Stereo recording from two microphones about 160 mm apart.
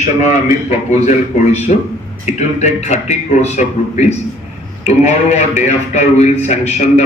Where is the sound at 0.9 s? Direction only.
45° left (ahead or behind).